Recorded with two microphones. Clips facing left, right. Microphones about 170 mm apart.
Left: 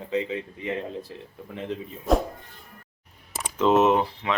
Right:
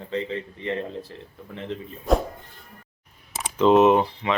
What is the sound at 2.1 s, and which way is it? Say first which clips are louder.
Speech: right 1 dB; centre (ahead or behind).